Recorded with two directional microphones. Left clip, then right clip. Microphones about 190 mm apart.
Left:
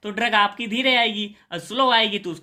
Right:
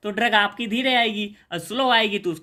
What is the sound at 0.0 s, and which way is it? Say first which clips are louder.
Speech: even; 25° right (ahead or behind).